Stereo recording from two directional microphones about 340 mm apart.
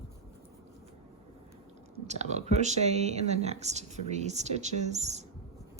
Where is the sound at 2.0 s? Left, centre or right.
Centre.